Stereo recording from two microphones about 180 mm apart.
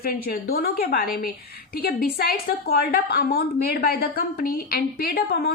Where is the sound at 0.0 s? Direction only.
55° left (ahead or behind).